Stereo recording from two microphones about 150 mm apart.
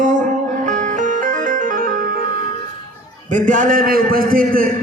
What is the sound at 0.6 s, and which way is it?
Music, 55° right (ahead or behind).